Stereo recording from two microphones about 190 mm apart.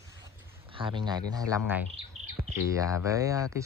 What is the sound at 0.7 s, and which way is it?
Speech, 25° right (ahead or behind).